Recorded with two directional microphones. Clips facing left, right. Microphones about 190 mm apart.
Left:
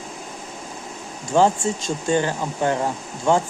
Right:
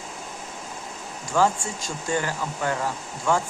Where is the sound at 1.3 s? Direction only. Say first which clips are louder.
Left 5 dB; 25° left (ahead or behind).